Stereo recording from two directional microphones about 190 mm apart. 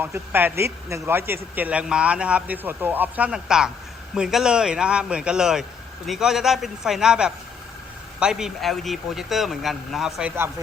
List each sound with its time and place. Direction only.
0.0 s a man's voice: 10° right (ahead or behind)